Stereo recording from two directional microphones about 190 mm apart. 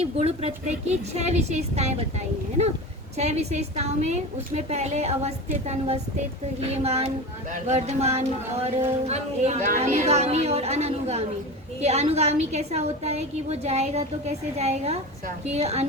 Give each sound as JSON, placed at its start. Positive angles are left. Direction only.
{"t": 0.0, "sound": "a woman's voice", "side_deg": -35}